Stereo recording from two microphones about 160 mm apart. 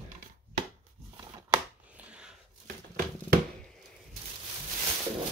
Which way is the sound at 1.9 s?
5° right (ahead or behind).